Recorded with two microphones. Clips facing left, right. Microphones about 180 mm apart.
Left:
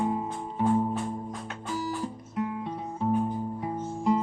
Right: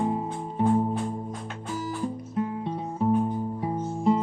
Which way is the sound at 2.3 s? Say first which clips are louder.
Even; 30° right (ahead or behind).